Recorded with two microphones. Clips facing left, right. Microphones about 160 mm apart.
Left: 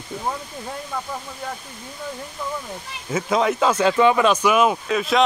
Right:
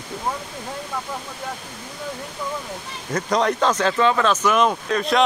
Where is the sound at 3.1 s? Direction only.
5° left (ahead or behind).